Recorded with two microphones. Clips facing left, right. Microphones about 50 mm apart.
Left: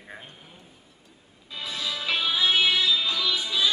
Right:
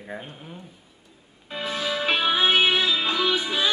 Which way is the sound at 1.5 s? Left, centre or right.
Right.